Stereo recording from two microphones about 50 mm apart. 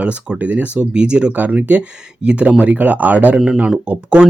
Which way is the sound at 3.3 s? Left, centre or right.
Centre.